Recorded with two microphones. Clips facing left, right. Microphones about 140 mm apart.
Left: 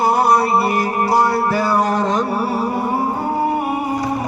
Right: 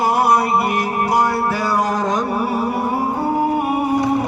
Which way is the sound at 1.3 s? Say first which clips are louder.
Left 1 dB; 10° left (ahead or behind).